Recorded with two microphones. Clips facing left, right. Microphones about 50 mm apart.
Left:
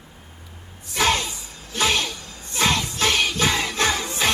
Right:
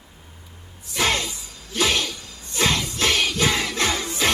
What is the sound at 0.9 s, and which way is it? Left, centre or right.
Music, left.